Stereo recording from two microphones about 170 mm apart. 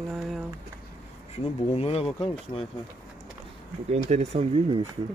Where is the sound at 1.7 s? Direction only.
35° left (ahead or behind).